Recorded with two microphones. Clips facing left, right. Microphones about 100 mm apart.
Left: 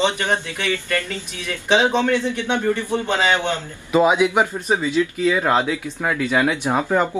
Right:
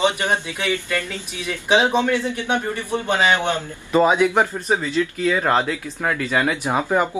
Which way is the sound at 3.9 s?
5° left (ahead or behind).